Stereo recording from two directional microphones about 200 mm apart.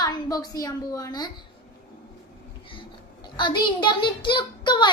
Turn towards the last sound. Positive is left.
turn(degrees=20)  # may be behind; listen again after turning